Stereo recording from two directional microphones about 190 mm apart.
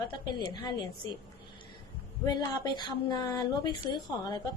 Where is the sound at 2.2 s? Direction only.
20° left (ahead or behind).